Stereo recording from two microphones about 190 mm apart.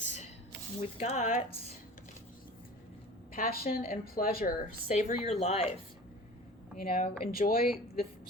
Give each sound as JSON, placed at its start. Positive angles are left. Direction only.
{"t": 0.8, "sound": "speech", "side_deg": 40}
{"t": 3.3, "sound": "speech", "side_deg": 50}
{"t": 6.7, "sound": "speech", "side_deg": 50}